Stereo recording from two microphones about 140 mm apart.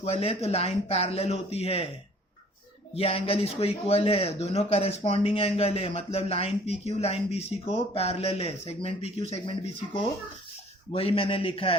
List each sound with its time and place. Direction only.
0.0 s speech: 45° left (ahead or behind)
2.9 s a man's voice: 45° left (ahead or behind)